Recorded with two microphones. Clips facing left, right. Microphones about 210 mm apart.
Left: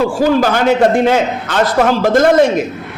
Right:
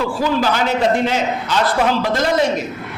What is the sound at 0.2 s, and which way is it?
A man's voice, 50° left (ahead or behind).